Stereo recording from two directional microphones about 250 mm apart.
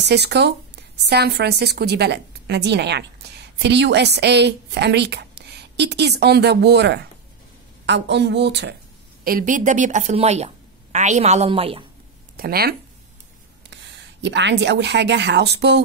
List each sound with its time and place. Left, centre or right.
0.0 s a woman's voice: right
12.4 s speech: right